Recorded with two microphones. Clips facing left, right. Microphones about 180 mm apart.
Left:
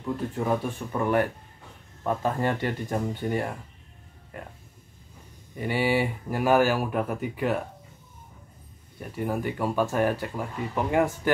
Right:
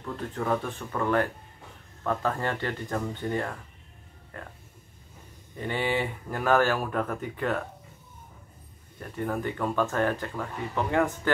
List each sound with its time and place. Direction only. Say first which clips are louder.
0.0 s speech: left 3 dB; 15° left (ahead or behind)
5.6 s speech: left 4 dB; 10° left (ahead or behind)
9.0 s speech: left 1 dB; 10° left (ahead or behind)